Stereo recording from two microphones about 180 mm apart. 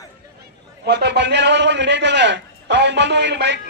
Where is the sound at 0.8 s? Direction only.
70° right (ahead or behind).